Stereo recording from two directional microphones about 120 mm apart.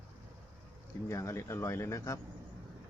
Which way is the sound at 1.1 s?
25° left (ahead or behind).